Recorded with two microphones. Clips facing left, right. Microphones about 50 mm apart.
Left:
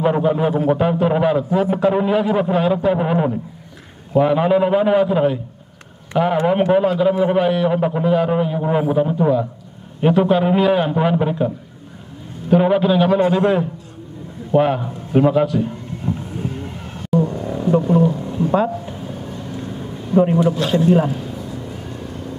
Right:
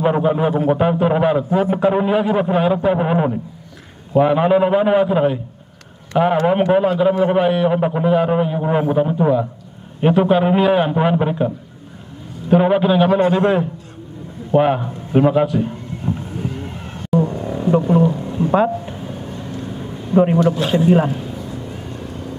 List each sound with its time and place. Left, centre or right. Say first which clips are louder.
0.0 s a man's voice: even; centre
13.2 s a man's voice: right 1 dB; right
14.5 s a sound: right 1 dB; centre
16.6 s vehicle: right 1 dB; centre
17.6 s speech: right 1 dB; right
18.9 s vehicle: even; centre
19.6 s a sound: even; centre
20.5 s a man's voice: even; right
20.9 s a man's voice: right 1 dB; right